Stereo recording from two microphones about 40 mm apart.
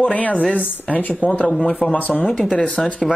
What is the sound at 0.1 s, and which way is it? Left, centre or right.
Speech, left.